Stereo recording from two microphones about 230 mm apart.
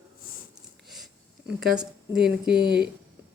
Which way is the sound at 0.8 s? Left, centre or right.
Centre.